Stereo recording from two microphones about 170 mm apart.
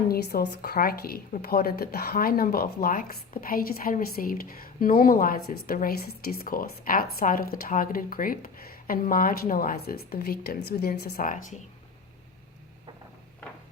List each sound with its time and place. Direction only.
0.1 s a woman's voice: 65° left (ahead or behind)